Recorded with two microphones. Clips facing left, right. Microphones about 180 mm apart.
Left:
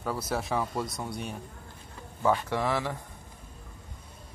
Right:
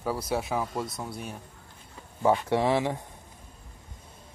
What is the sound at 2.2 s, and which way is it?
Speech, 20° right (ahead or behind).